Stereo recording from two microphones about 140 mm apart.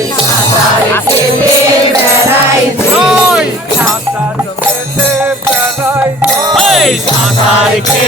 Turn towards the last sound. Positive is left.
turn(degrees=0)  # may be behind; listen again after turning